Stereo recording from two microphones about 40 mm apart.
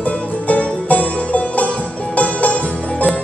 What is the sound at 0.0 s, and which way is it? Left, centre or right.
Music, left.